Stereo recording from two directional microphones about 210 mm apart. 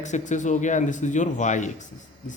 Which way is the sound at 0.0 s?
35° left (ahead or behind).